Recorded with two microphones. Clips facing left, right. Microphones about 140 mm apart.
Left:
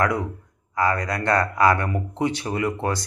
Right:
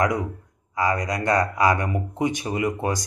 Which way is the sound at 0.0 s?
20° right (ahead or behind).